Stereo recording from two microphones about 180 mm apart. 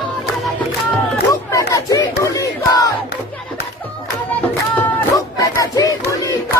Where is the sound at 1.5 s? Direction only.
15° left (ahead or behind).